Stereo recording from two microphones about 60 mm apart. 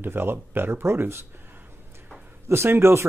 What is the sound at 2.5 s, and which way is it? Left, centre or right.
Speech, right.